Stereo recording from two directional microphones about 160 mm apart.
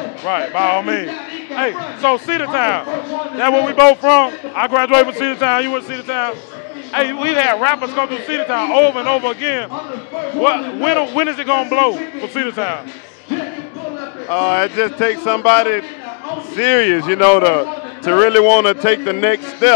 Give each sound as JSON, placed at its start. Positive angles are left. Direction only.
{"t": 0.2, "sound": "a man's voice", "side_deg": 15}
{"t": 14.3, "sound": "a man's voice", "side_deg": 15}